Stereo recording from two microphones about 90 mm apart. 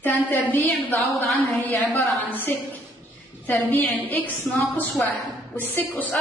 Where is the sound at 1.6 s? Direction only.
20° left (ahead or behind).